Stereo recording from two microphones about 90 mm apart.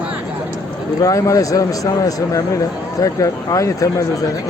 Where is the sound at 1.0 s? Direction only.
35° left (ahead or behind).